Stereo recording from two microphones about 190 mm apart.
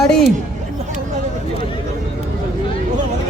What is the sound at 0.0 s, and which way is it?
Speech, centre (ahead or behind).